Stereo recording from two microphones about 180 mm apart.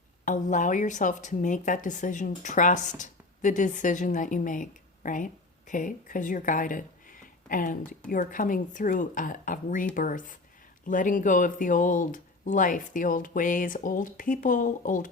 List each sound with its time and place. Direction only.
0.3 s a woman's voice: 45° left (ahead or behind)